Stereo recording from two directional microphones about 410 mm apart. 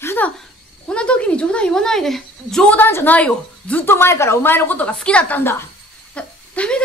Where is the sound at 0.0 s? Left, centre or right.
Centre.